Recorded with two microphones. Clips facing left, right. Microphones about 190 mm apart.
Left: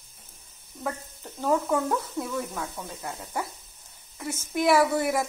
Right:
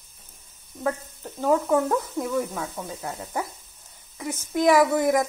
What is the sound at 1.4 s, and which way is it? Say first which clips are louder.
Speech: right 3 dB; 5° right (ahead or behind).